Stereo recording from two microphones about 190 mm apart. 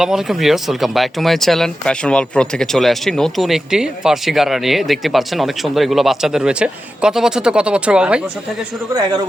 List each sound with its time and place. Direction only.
0.0 s speech: centre (ahead or behind)
8.9 s a man's voice: 20° right (ahead or behind)